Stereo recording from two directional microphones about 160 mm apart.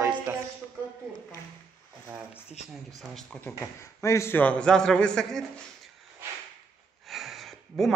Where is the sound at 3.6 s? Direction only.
20° left (ahead or behind); by 5.4 s 5° left (ahead or behind).